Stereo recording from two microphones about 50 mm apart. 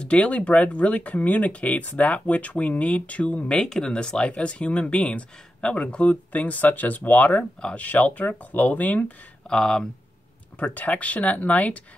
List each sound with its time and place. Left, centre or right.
0.0 s speech: left
9.5 s speech: centre
10.6 s speech: left